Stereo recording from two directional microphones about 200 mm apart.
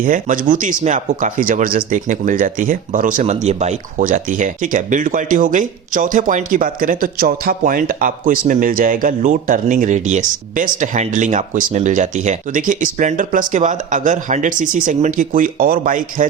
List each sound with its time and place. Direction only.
0.0 s speech: 40° right (ahead or behind)